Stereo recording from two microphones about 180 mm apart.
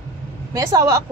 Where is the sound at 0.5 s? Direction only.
20° right (ahead or behind).